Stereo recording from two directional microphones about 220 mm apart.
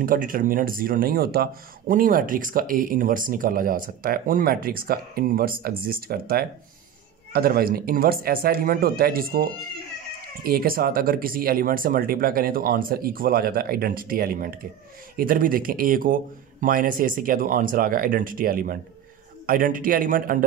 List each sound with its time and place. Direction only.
0.0 s speech: 40° right (ahead or behind)